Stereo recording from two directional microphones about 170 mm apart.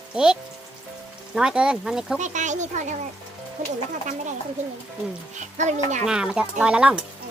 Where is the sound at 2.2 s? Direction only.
45° right (ahead or behind).